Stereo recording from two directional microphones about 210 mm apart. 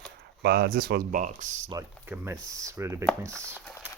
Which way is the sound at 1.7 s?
10° right (ahead or behind).